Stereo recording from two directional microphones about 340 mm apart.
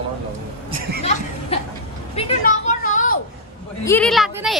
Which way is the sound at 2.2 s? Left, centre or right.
Left.